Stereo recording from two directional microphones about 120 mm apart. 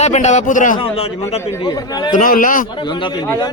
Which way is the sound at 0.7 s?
55° left (ahead or behind).